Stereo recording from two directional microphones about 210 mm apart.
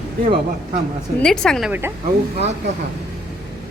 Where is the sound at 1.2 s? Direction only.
5° left (ahead or behind).